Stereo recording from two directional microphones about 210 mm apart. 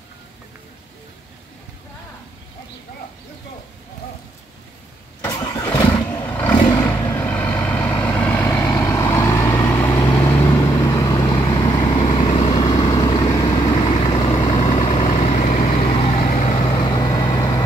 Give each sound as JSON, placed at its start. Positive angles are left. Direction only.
{"t": 5.2, "sound": "vehicle", "side_deg": 15}